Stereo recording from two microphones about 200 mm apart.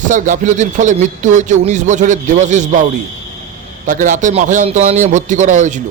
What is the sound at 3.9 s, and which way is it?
Speech, 40° right (ahead or behind).